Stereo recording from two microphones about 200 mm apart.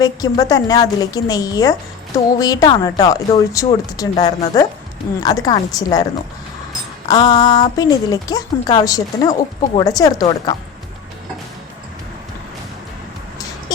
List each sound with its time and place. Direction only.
0.0 s speech: 20° left (ahead or behind)
7.1 s speech: 20° left (ahead or behind)